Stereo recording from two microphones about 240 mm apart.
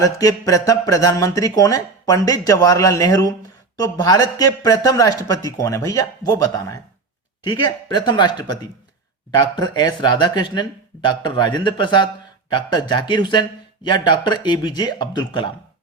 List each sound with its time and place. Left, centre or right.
0.0 s speech: centre
9.6 s speech: centre